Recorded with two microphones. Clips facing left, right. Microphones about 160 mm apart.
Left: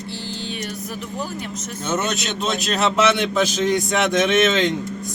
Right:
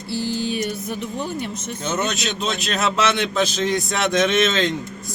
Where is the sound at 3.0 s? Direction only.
10° left (ahead or behind).